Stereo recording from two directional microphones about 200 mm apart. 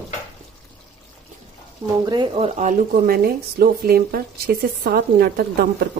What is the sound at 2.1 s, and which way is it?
Speech, 25° right (ahead or behind).